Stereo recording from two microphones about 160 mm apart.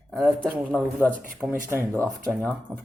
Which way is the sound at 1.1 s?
55° right (ahead or behind).